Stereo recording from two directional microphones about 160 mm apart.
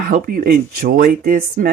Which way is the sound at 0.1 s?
65° right (ahead or behind).